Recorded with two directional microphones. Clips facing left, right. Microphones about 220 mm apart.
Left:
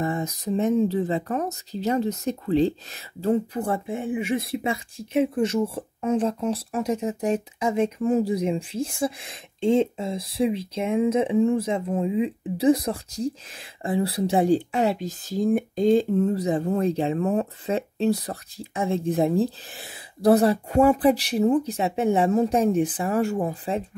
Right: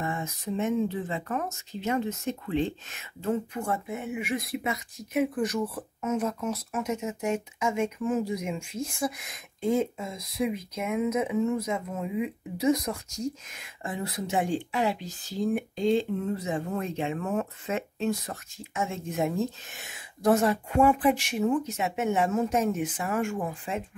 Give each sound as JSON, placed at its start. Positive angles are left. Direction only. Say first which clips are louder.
{"t": 0.0, "sound": "speech", "louder": "left 6 dB", "side_deg": 35}